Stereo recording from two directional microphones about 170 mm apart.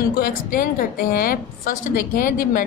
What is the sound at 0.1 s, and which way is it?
A woman's voice, 55° left (ahead or behind).